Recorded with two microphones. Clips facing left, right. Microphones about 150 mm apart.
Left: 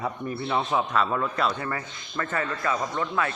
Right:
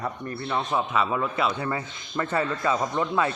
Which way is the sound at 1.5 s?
15° right (ahead or behind).